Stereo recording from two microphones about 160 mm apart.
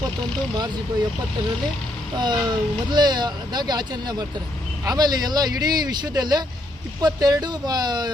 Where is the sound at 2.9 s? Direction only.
25° right (ahead or behind).